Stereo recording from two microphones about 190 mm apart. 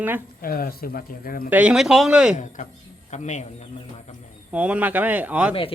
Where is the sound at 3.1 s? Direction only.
40° left (ahead or behind).